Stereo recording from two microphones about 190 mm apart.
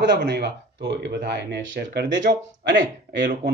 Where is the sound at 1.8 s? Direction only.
65° right (ahead or behind).